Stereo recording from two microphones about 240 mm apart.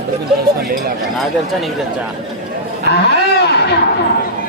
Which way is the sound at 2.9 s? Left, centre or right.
Left.